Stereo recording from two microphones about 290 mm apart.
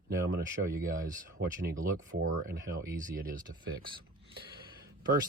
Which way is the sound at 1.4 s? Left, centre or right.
Right.